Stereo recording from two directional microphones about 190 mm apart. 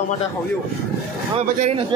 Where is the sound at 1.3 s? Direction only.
30° right (ahead or behind).